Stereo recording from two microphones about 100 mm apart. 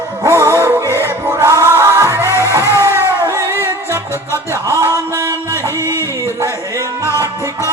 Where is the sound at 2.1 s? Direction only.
30° left (ahead or behind).